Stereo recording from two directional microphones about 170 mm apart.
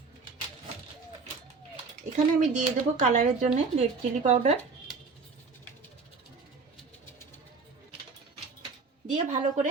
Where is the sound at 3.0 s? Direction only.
45° right (ahead or behind).